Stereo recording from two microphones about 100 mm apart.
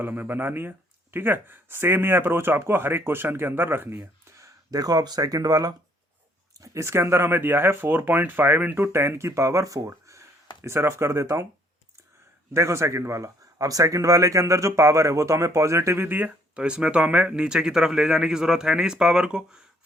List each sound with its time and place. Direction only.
0.0 s speech: 20° right (ahead or behind); by 5.7 s 40° right (ahead or behind)
6.6 s speech: 30° right (ahead or behind)
12.5 s speech: 30° right (ahead or behind); by 19.6 s 10° right (ahead or behind)